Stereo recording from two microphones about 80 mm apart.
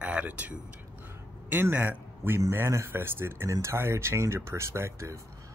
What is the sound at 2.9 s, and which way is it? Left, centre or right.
A man's voice, right.